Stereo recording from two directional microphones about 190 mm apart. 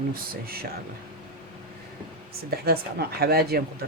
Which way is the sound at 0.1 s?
50° right (ahead or behind).